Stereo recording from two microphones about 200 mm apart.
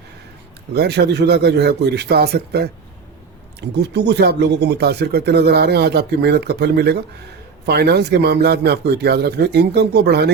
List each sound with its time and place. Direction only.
0.7 s speech: 55° right (ahead or behind)
3.7 s speech: 55° right (ahead or behind)